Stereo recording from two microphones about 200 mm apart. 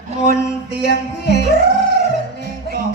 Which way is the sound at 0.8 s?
55° left (ahead or behind).